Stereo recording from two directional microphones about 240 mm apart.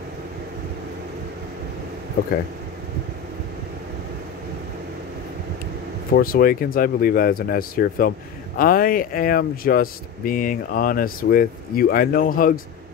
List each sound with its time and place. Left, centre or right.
6.1 s speech: left